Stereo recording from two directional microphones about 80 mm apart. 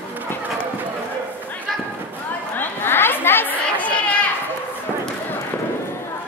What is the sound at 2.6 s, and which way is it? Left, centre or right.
Chatter, left.